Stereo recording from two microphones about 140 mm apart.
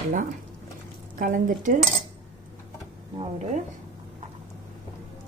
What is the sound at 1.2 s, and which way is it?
Speech, 75° right (ahead or behind).